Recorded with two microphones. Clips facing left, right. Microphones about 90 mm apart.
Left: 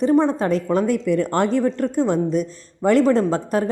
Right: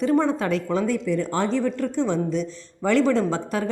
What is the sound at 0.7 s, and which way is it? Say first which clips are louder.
Speech: left 4 dB; 50° left (ahead or behind).